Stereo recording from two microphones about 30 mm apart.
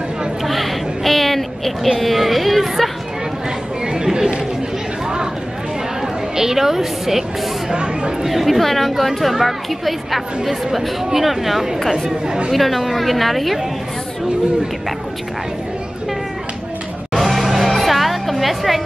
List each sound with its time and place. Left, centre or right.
0.5 s a sound: centre
2.0 s a woman's voice: centre
3.8 s chatter: right
6.3 s a woman's voice: centre
7.7 s speech: right
8.3 s a woman's voice: centre
17.1 s music: centre